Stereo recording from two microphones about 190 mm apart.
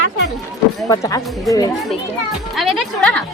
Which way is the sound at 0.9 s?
20° left (ahead or behind).